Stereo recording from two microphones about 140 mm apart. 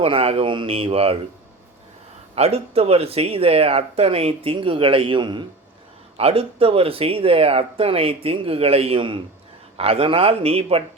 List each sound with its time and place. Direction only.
0.0 s speech: 45° right (ahead or behind)
2.3 s speech: 45° right (ahead or behind)